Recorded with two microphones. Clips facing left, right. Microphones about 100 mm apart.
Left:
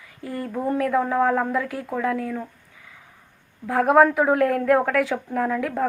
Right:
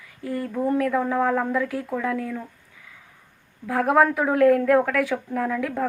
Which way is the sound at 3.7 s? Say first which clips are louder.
Left 3 dB; 15° left (ahead or behind).